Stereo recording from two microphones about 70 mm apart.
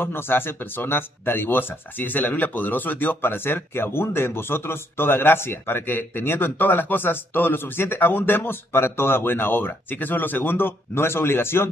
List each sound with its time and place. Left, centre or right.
0.0 s speech: left